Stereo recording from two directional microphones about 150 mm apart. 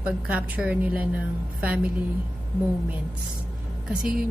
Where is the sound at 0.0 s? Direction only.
10° right (ahead or behind).